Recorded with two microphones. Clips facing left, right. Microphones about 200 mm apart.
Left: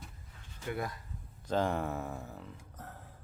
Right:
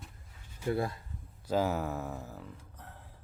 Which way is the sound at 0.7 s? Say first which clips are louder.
Right 5 dB; 30° right (ahead or behind).